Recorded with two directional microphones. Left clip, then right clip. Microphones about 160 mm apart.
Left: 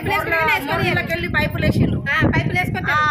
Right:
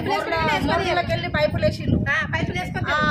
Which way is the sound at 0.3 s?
45° left (ahead or behind).